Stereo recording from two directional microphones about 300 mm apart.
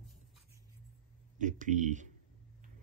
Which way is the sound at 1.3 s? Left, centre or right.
Right.